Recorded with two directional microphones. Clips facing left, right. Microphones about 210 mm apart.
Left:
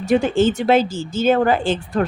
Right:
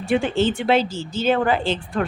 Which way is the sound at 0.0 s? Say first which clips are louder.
Left 4 dB; 40° left (ahead or behind).